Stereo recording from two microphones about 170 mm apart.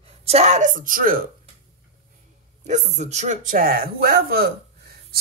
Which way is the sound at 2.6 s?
45° right (ahead or behind).